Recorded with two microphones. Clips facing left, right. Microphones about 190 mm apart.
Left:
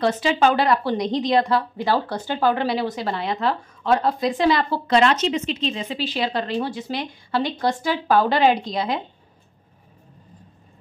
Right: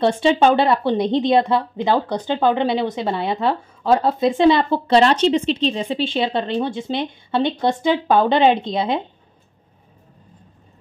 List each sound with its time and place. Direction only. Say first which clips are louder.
0.0 s a woman's voice: right 4 dB; 25° right (ahead or behind)